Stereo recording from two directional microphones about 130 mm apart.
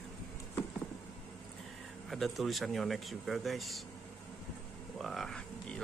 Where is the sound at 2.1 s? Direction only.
Centre (ahead or behind).